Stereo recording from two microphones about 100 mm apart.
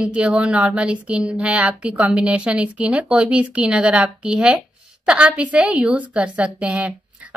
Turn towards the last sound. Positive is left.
turn(degrees=-15)  # may be behind; listen again after turning